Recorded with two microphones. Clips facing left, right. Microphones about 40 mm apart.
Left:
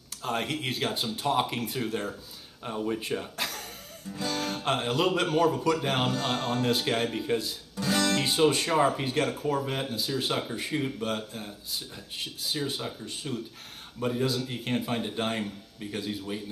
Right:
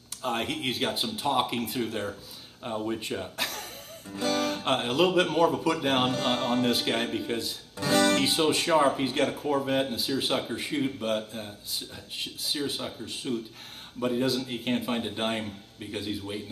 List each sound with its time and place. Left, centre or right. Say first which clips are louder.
0.2 s speech: right 1 dB; centre
4.2 s mantra: right 4 dB; right
4.6 s speech: right 1 dB; centre
6.0 s mantra: right 2 dB; right
6.7 s speech: even; centre
7.7 s music: right 3 dB; right
8.2 s speech: left 1 dB; centre